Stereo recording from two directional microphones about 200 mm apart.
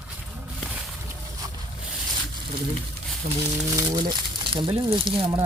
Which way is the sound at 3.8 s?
20° right (ahead or behind).